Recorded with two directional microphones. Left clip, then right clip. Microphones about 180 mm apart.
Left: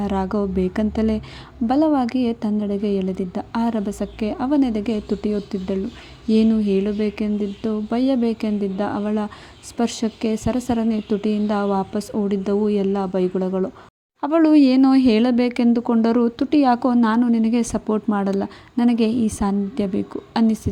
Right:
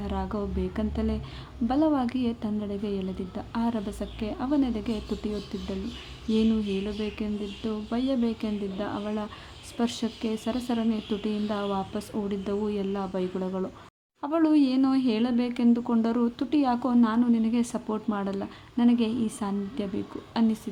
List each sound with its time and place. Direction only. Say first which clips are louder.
0.0 s a woman's voice: left 9 dB; 35° left (ahead or behind)